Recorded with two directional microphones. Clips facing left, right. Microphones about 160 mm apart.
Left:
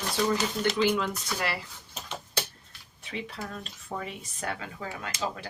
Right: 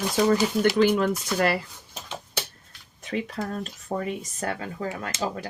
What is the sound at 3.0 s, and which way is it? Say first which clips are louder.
Speech: right 7 dB; 45° right (ahead or behind).